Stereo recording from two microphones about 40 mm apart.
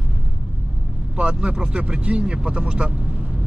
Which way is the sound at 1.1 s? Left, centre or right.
Right.